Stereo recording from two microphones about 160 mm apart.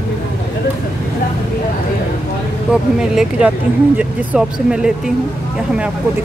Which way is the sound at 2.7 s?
5° right (ahead or behind).